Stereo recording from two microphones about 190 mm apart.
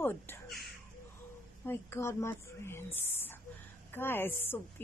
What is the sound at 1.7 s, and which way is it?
Speech, 15° left (ahead or behind).